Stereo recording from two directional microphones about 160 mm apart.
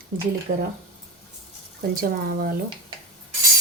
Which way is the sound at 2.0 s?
65° right (ahead or behind).